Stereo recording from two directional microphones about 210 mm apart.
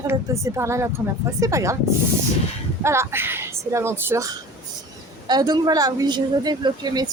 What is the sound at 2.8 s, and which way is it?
A woman's voice, 10° right (ahead or behind).